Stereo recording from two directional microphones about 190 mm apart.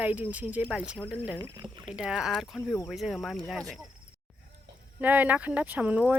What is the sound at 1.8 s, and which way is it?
Speech, 5° right (ahead or behind).